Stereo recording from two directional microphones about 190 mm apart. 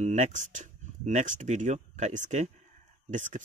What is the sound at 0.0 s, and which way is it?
Speech, 40° right (ahead or behind).